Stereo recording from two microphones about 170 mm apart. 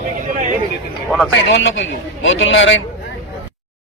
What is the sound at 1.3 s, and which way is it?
A man's voice, 90° left.